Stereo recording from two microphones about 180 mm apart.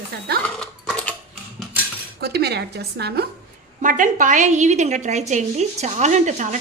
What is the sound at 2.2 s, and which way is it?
A woman's voice, 65° right (ahead or behind).